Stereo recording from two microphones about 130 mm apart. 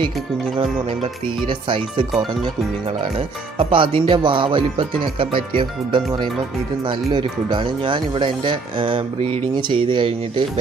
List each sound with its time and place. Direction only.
1.5 s speech: 40° right (ahead or behind)